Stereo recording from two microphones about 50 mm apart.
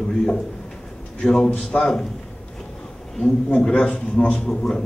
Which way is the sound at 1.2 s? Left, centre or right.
Centre.